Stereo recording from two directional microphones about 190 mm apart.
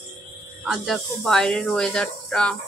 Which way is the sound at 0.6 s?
Centre (ahead or behind).